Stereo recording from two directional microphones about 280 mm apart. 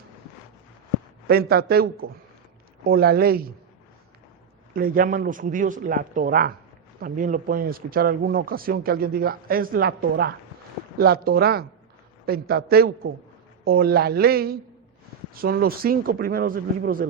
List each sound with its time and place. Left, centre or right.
1.3 s speech: right
4.7 s speech: right